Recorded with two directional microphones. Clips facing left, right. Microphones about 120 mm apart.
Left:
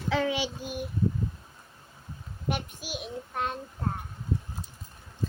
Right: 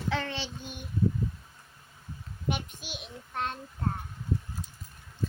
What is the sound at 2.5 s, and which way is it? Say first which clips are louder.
A child's voice: left 2 dB; 5° left (ahead or behind).